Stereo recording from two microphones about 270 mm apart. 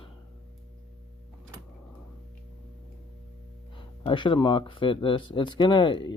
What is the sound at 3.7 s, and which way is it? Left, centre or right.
Speech, centre.